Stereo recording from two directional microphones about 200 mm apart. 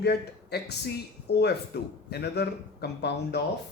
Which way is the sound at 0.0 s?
55° left (ahead or behind).